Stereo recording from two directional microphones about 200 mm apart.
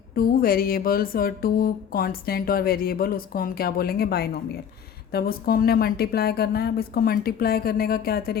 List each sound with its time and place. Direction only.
0.2 s speech: 45° left (ahead or behind)